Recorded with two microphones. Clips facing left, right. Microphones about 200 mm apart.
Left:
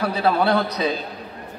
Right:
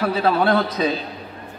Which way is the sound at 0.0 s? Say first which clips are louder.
Right 1 dB; 50° right (ahead or behind).